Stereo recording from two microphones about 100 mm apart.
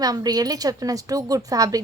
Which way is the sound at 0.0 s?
40° right (ahead or behind).